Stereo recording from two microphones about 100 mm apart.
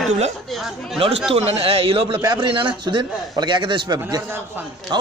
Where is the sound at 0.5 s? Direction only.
Centre (ahead or behind).